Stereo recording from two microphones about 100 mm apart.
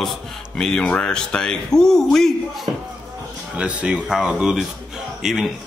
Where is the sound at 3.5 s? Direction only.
10° right (ahead or behind).